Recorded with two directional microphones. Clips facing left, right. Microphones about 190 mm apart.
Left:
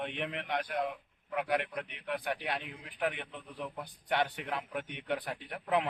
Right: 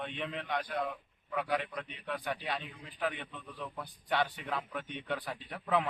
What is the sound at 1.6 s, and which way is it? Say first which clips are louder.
Speech: left 2 dB; 70° left (ahead or behind).